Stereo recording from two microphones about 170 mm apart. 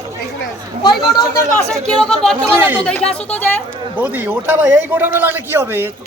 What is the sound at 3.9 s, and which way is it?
A man's voice, 10° right (ahead or behind).